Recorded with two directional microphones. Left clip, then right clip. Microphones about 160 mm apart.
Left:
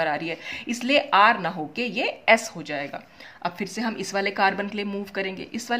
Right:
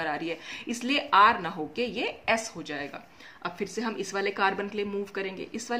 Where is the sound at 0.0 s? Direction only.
35° left (ahead or behind).